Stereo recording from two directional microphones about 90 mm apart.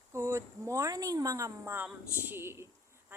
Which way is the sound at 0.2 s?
35° right (ahead or behind).